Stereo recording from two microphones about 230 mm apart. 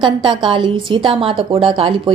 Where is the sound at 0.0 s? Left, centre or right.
Right.